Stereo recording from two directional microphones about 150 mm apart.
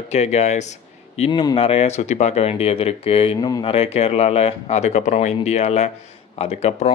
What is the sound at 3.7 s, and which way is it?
Speech, 40° left (ahead or behind).